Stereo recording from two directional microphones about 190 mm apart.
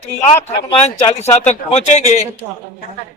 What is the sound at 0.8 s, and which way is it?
Speech, 35° left (ahead or behind).